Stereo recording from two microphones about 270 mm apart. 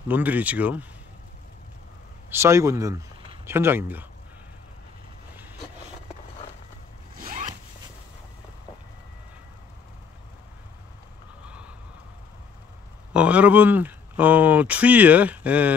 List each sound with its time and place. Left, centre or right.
0.1 s speech: centre
2.2 s speech: centre
7.2 s zipper: right
11.4 s vehicle: centre
13.1 s speech: centre